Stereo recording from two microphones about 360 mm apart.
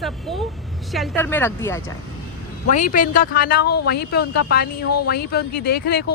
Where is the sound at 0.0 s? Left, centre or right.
Centre.